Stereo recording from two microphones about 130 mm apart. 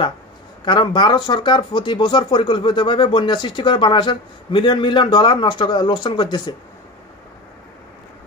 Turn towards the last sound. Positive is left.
turn(degrees=35)  # may be behind; listen again after turning